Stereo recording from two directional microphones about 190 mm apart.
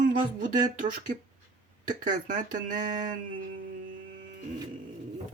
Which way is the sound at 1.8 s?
45° right (ahead or behind).